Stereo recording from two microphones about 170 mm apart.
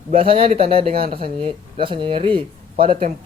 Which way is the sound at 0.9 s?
60° right (ahead or behind).